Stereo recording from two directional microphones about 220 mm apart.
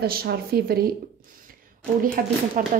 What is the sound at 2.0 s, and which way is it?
Speech, 40° right (ahead or behind).